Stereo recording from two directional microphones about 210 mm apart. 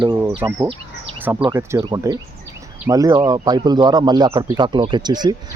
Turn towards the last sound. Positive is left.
turn(degrees=-20)  # may be behind; listen again after turning